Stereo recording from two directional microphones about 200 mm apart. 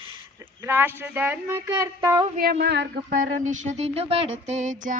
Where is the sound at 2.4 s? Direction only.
55° right (ahead or behind).